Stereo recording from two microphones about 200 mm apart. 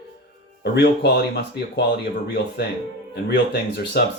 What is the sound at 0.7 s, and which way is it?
Speech, 55° left (ahead or behind).